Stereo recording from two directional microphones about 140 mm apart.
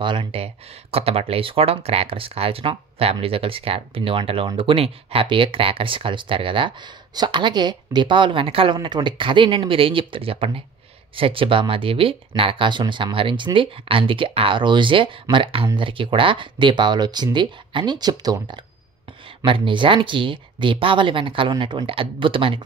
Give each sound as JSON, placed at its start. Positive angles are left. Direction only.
{"t": 0.0, "sound": "speech", "side_deg": -40}